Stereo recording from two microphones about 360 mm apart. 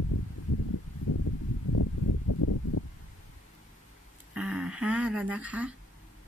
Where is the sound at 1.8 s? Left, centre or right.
Left.